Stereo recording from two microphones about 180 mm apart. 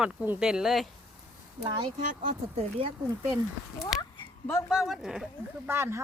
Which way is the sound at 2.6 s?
30° right (ahead or behind).